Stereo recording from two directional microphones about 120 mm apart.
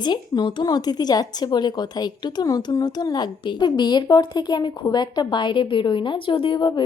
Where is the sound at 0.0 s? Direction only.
40° left (ahead or behind).